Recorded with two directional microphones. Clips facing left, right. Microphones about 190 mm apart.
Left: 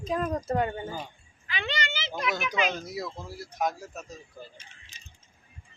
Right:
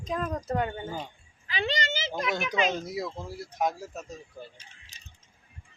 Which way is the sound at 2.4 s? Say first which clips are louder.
Right 1 dB; 25° right (ahead or behind).